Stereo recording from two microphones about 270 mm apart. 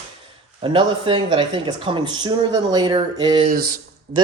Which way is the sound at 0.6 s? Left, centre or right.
Centre.